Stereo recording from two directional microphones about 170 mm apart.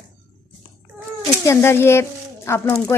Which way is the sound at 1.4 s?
15° left (ahead or behind).